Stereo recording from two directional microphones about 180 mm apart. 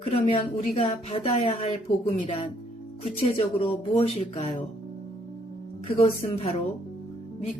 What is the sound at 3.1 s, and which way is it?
Speech, 35° left (ahead or behind).